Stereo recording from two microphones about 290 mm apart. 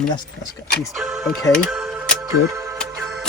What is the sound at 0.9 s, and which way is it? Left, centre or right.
Music, centre.